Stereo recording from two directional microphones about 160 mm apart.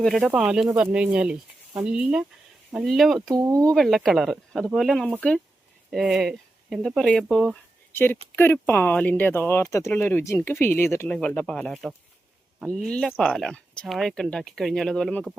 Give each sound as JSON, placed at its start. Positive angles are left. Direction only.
{"t": 0.0, "sound": "speech", "side_deg": 0}
{"t": 3.3, "sound": "speech", "side_deg": -20}
{"t": 3.8, "sound": "speech", "side_deg": 0}